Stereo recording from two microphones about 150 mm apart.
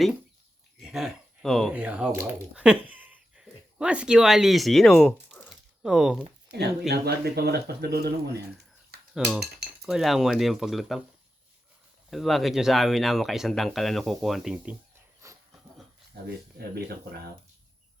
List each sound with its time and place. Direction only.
0.8 s speech: centre (ahead or behind)
5.3 s a sound: 5° right (ahead or behind)
6.5 s speech: 90° right
8.9 s cutlery: 90° right
9.8 s speech: centre (ahead or behind)
12.1 s speech: centre (ahead or behind)
15.2 s dog: 20° right (ahead or behind)